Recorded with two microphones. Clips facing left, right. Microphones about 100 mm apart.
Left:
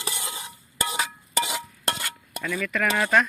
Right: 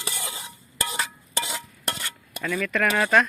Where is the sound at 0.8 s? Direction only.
15° left (ahead or behind).